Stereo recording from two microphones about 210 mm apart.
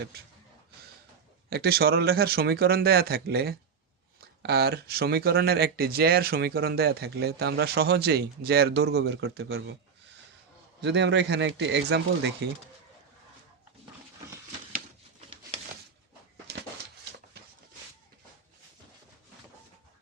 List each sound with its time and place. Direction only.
1.5 s speech: 50° right (ahead or behind)
10.8 s a man's voice: 55° right (ahead or behind)
16.5 s a sound: 55° right (ahead or behind)